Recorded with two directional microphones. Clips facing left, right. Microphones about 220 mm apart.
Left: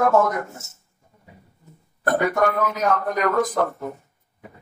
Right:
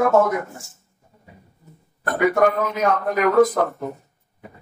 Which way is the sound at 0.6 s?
20° left (ahead or behind).